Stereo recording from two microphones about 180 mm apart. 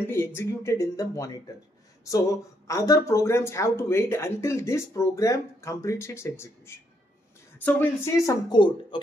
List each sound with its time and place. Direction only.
0.0 s speech: 15° left (ahead or behind)